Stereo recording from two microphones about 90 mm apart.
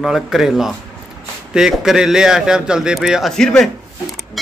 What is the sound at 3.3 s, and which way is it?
Speech, 5° left (ahead or behind).